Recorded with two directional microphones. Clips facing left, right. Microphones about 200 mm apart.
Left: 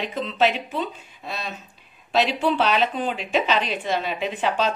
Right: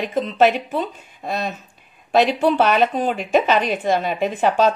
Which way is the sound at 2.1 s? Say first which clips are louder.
Right 5 dB; 50° right (ahead or behind).